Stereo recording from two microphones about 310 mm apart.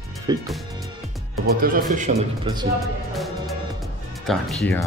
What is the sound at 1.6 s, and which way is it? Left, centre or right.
A man's voice, right.